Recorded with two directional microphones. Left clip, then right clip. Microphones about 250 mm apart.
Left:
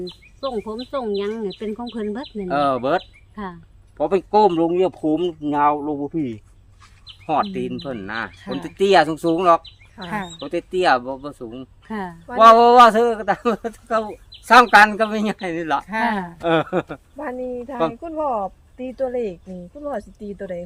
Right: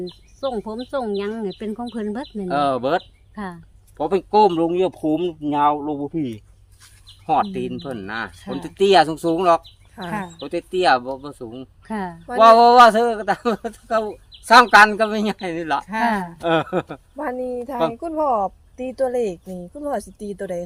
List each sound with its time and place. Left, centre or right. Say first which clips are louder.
0.0 s speech: right 1 dB; right
2.5 s a man's voice: even; centre
3.3 s speech: even; right
3.9 s a man's voice: even; centre
11.9 s speech: right 2 dB; right
12.4 s a man's voice: even; centre
17.2 s speech: right 2 dB; right